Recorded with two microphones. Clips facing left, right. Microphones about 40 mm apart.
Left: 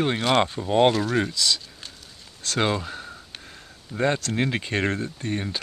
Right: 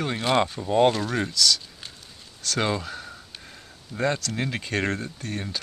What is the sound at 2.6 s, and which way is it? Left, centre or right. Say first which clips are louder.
Speech: left 2 dB; centre.